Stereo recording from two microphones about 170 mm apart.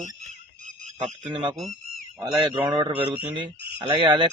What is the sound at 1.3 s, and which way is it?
Speech, 30° right (ahead or behind).